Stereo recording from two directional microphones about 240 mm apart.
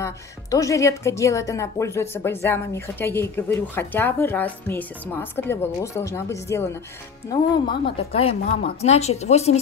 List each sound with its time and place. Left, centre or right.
0.0 s a woman's voice: centre